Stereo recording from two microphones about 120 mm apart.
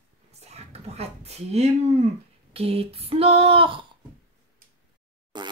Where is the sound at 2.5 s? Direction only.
55° right (ahead or behind).